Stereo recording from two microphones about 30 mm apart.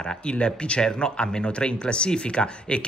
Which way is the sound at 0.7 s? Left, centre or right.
Left.